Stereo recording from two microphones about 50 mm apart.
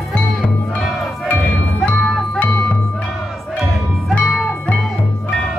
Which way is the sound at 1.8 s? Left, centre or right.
Left.